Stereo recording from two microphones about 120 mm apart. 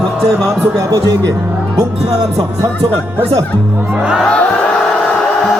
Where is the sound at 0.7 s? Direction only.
25° right (ahead or behind).